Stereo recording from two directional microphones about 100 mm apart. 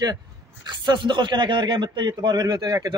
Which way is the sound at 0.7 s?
50° right (ahead or behind).